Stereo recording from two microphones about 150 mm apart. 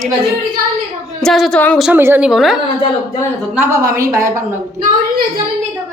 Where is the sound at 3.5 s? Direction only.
15° right (ahead or behind).